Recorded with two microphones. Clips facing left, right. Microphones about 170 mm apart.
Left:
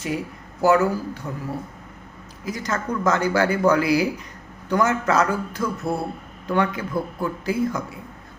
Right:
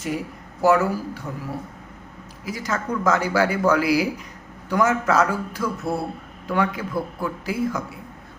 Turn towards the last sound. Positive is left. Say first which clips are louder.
# left 1 dB
turn(degrees=-5)  # may be behind; listen again after turning